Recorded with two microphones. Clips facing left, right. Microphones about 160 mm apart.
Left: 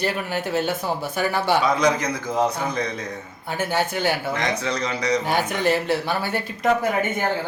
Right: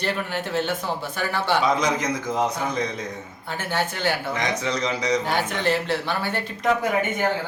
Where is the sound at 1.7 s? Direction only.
20° right (ahead or behind).